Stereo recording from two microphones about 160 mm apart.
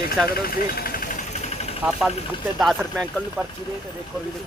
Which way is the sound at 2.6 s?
Centre (ahead or behind).